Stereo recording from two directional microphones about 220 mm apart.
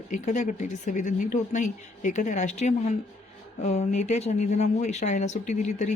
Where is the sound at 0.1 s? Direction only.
35° left (ahead or behind).